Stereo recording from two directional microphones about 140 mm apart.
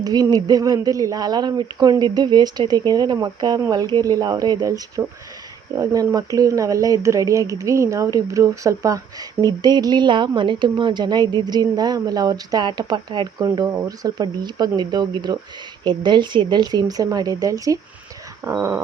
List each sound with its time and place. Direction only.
0.0 s a woman's voice: 30° right (ahead or behind)